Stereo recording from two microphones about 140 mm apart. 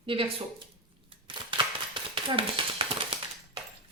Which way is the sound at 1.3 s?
35° right (ahead or behind).